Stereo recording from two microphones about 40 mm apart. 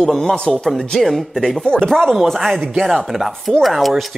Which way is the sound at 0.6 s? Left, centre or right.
Centre.